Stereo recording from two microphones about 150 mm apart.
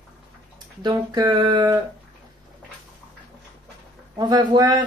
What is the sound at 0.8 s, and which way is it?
Speech, 30° right (ahead or behind).